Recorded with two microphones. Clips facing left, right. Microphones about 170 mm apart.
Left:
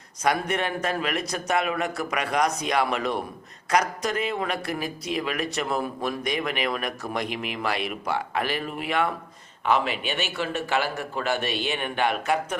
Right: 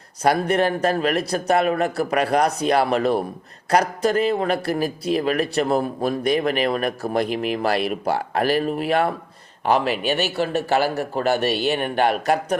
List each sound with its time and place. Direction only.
0.2 s a man's voice: 35° right (ahead or behind)